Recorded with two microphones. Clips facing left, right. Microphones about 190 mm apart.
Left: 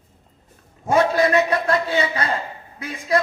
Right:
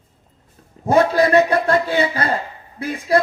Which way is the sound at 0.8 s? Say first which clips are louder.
Right 3 dB; 35° right (ahead or behind).